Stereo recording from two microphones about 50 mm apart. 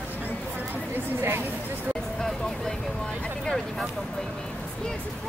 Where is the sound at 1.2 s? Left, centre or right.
Right.